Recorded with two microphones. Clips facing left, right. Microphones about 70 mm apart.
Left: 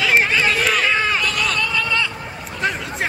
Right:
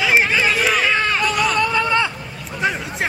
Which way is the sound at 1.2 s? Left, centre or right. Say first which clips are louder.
Right 3 dB; centre.